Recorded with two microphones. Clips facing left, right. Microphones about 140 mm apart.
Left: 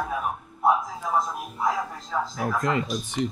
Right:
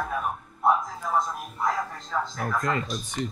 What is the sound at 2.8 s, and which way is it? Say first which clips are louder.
Speech: left 4 dB; centre (ahead or behind).